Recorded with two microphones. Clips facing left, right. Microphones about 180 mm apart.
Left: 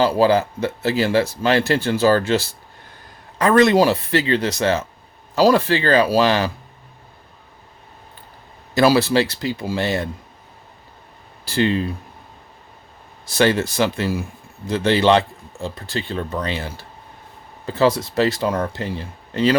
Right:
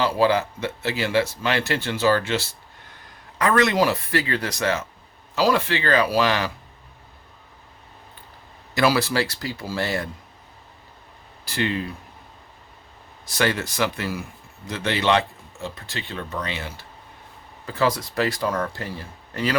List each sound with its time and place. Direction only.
0.0 s speech: 35° left (ahead or behind)
5.3 s speech: 40° left (ahead or behind)
8.7 s speech: 30° left (ahead or behind)
11.4 s speech: 30° left (ahead or behind)
13.2 s speech: 30° left (ahead or behind)